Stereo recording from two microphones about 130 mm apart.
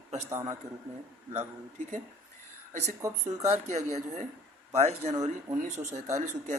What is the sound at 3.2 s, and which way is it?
Speech, 60° right (ahead or behind).